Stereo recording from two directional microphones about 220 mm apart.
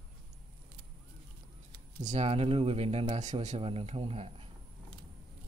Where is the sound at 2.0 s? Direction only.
30° right (ahead or behind).